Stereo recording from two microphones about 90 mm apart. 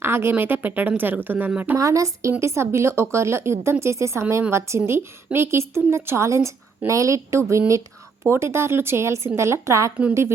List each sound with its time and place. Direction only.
0.0 s a woman's voice: 25° right (ahead or behind)
1.7 s a woman's voice: 35° right (ahead or behind)